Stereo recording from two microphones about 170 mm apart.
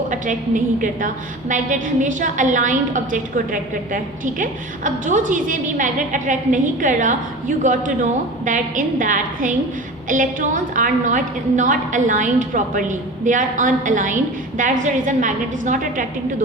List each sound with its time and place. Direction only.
0.1 s a woman's voice: 50° right (ahead or behind)